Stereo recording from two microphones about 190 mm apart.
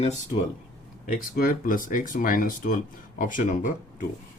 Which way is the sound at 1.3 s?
45° left (ahead or behind).